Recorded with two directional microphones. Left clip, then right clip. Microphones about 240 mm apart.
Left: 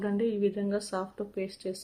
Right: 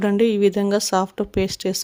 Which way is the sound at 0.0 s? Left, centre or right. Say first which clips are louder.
Right 12 dB; right.